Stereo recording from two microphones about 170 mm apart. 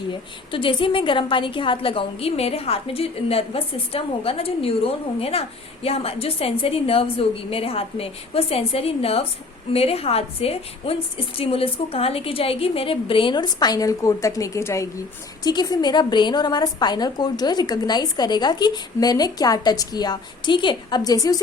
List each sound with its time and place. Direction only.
0.1 s a woman's voice: 30° left (ahead or behind)